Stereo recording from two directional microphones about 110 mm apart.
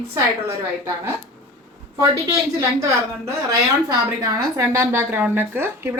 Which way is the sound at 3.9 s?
35° right (ahead or behind).